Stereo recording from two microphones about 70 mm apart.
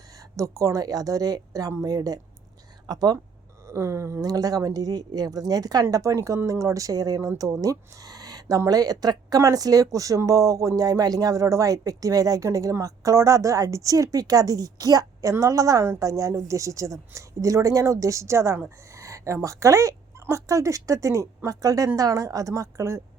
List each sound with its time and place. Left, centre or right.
0.3 s speech: right
2.8 s speech: right
3.7 s speech: right
4.2 s speech: right
5.9 s speech: right
7.3 s a woman's voice: right